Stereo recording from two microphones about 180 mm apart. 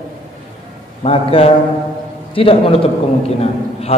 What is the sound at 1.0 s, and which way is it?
A man's voice, 30° left (ahead or behind).